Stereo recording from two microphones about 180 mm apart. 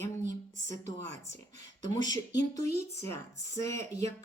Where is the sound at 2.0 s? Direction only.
20° left (ahead or behind).